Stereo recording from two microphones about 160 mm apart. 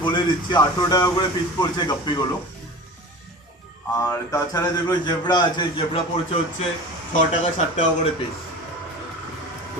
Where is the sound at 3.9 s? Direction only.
20° left (ahead or behind).